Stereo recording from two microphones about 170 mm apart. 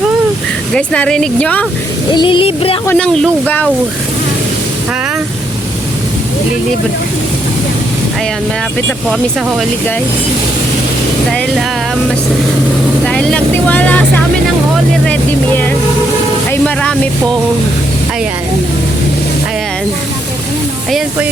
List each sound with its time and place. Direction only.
0.7 s speech: 5° left (ahead or behind)
2.1 s a sound: 30° left (ahead or behind)
2.8 s speech: 5° left (ahead or behind)
9.0 s speech: centre (ahead or behind)
13.1 s speech: 5° left (ahead or behind)
15.0 s speech: 10° left (ahead or behind)
16.5 s a sound: 5° left (ahead or behind)